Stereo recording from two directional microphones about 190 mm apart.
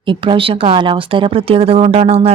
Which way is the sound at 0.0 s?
25° right (ahead or behind).